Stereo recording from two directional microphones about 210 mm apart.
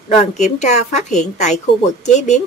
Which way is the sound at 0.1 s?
35° left (ahead or behind).